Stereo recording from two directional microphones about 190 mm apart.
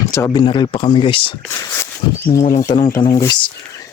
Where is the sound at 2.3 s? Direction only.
50° left (ahead or behind).